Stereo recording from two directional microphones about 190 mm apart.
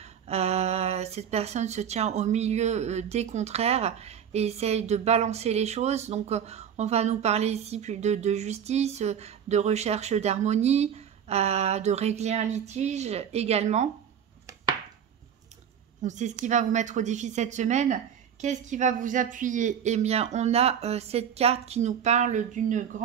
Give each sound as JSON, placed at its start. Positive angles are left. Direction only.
{"t": 0.3, "sound": "speech", "side_deg": -35}
{"t": 16.0, "sound": "speech", "side_deg": -40}